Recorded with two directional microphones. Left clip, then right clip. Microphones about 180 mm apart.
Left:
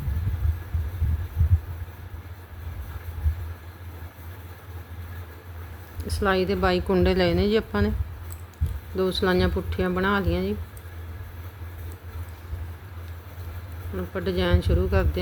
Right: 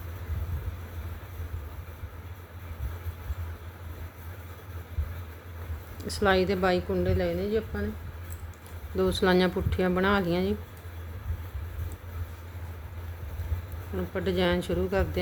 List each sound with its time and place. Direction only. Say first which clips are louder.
6.0 s speech: left 1 dB; 5° left (ahead or behind)
6.9 s a woman's voice: left 6 dB; 45° left (ahead or behind)
9.0 s speech: left 1 dB; 5° left (ahead or behind)
13.9 s speech: left 1 dB; 5° left (ahead or behind)